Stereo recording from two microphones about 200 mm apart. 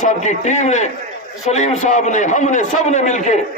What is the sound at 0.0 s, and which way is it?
A man's voice, 35° left (ahead or behind).